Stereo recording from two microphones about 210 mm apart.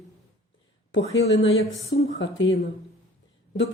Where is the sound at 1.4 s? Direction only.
70° left (ahead or behind).